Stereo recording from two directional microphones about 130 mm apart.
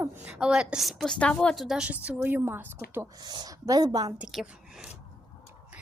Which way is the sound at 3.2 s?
35° right (ahead or behind).